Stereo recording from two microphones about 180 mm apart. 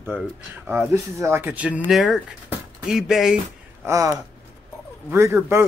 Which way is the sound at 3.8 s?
15° right (ahead or behind).